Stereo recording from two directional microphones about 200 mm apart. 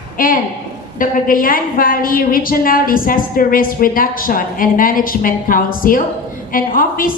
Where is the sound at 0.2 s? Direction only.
40° left (ahead or behind).